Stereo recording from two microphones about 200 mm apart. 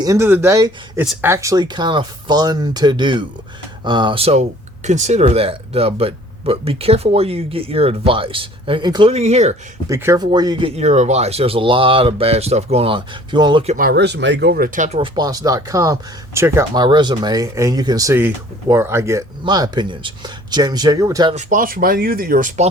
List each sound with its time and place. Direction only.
0.0 s speech: 15° right (ahead or behind); by 9.6 s 35° right (ahead or behind)
9.9 s speech: 15° right (ahead or behind)
13.7 s speech: 50° right (ahead or behind)
14.9 s speech: 25° right (ahead or behind)
21.3 s speech: 40° right (ahead or behind)